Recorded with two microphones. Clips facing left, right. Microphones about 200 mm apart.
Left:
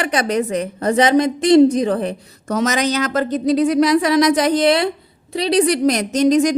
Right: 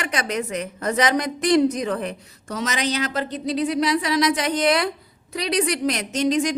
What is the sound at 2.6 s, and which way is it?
A woman's voice, 45° left (ahead or behind).